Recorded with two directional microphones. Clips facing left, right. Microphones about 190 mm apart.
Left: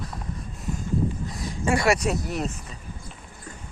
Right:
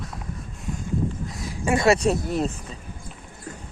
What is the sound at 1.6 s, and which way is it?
Speech, 20° right (ahead or behind).